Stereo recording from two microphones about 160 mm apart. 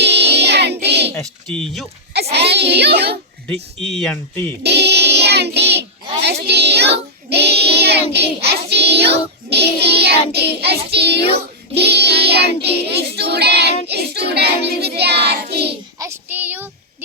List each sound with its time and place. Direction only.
0.0 s child singing: 90° right
1.2 s speech: 5° left (ahead or behind)
2.3 s child singing: 90° right
3.5 s speech: 5° left (ahead or behind)
4.6 s music: 90° right
6.5 s child singing: 90° right
16.0 s child singing: 15° right (ahead or behind)